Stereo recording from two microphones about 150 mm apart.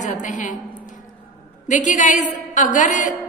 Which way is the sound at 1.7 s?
55° left (ahead or behind).